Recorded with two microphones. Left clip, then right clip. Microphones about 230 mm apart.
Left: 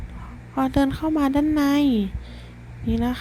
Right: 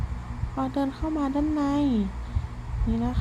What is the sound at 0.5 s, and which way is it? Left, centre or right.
Speech, left.